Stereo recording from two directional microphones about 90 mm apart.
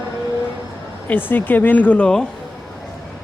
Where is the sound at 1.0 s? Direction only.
20° left (ahead or behind).